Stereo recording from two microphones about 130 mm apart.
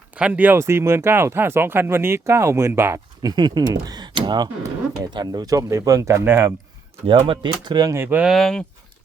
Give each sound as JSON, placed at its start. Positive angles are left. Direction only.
{"t": 0.2, "sound": "speech", "side_deg": -10}
{"t": 3.2, "sound": "speech", "side_deg": -35}
{"t": 7.3, "sound": "speech", "side_deg": -35}
{"t": 7.9, "sound": "speech", "side_deg": -15}
{"t": 8.3, "sound": "speech", "side_deg": 0}